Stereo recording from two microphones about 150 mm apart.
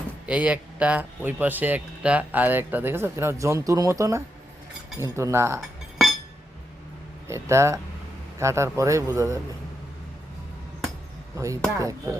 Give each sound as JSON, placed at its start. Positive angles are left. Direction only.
{"t": 0.3, "sound": "a man's voice", "side_deg": -10}
{"t": 5.5, "sound": "cutlery", "side_deg": 0}
{"t": 7.3, "sound": "a man's voice", "side_deg": -20}
{"t": 11.3, "sound": "a man's voice", "side_deg": -20}